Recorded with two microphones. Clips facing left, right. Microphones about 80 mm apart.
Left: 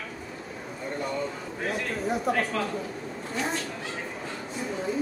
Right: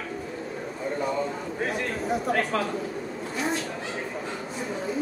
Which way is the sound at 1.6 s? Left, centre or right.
Centre.